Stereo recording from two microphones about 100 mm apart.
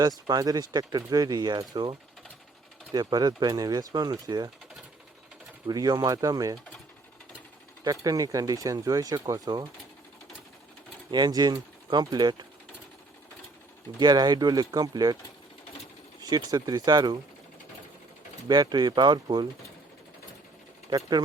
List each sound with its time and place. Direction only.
0.3 s speech: 40° right (ahead or behind)
5.6 s speech: 40° right (ahead or behind)
7.9 s speech: 35° right (ahead or behind)
11.1 s speech: 45° right (ahead or behind)
14.0 s speech: 45° right (ahead or behind)
16.3 s speech: 40° right (ahead or behind)
18.4 s speech: 45° right (ahead or behind)
20.9 s speech: 45° right (ahead or behind)